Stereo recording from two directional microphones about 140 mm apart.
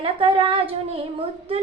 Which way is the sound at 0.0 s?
40° right (ahead or behind).